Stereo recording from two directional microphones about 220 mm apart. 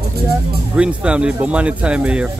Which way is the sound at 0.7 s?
5° right (ahead or behind).